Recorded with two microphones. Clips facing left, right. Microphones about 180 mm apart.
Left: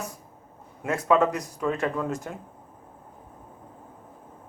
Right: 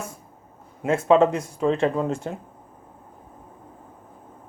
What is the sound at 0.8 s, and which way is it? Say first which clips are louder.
Speech: right 5 dB; 25° right (ahead or behind).